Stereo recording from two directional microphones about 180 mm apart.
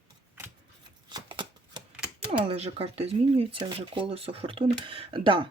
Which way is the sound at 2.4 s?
30° right (ahead or behind).